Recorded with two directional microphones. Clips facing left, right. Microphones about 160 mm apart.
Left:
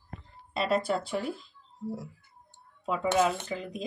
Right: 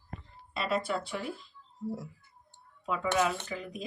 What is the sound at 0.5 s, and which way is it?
Speech, 35° left (ahead or behind).